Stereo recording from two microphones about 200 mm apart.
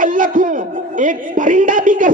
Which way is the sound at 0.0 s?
40° right (ahead or behind).